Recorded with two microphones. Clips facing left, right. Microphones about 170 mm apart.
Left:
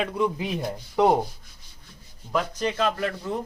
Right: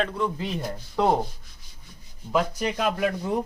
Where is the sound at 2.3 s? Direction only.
10° right (ahead or behind).